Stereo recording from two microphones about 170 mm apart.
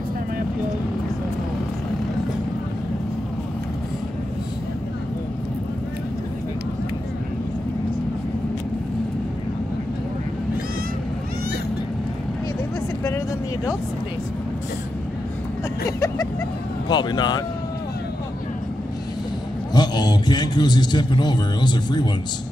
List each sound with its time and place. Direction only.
16.9 s speech: 25° left (ahead or behind)
19.7 s a man's voice: 25° left (ahead or behind)